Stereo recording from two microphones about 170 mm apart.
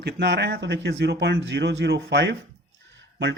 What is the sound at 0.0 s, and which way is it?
Speech, 85° right.